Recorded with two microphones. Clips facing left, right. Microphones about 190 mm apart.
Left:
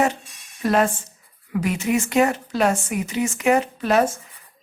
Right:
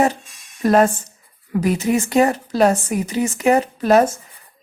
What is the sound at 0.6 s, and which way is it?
A woman's voice, 40° right (ahead or behind).